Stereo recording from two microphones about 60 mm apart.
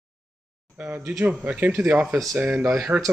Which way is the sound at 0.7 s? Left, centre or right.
Right.